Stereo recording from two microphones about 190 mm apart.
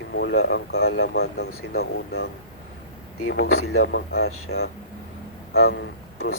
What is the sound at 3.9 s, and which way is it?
Speech, 55° left (ahead or behind).